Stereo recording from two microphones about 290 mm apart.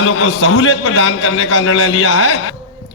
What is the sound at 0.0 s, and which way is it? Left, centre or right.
A man's voice, left.